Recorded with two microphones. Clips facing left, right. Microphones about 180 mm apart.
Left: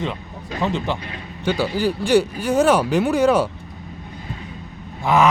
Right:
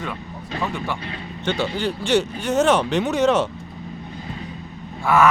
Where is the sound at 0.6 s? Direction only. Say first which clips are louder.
Left 4 dB; 20° left (ahead or behind).